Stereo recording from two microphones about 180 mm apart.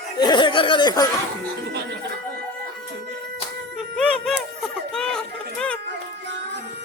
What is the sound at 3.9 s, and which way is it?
Music, 5° left (ahead or behind).